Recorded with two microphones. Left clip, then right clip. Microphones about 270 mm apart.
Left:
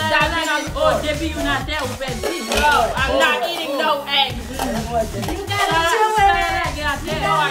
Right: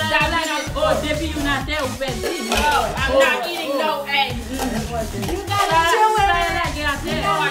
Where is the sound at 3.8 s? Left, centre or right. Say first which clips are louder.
Left 2 dB; centre.